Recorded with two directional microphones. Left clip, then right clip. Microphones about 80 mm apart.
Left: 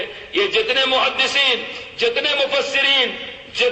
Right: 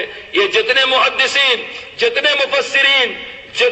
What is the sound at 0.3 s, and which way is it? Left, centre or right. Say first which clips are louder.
A man's voice: right 4 dB; right.